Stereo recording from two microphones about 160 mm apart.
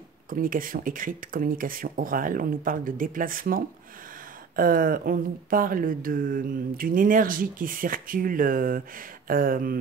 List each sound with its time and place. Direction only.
0.3 s speech: 60° right (ahead or behind)